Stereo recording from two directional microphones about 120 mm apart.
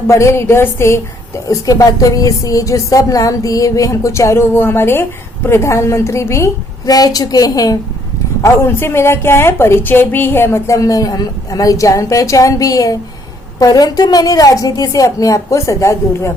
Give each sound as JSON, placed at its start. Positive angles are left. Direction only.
{"t": 0.1, "sound": "a woman's voice", "side_deg": 25}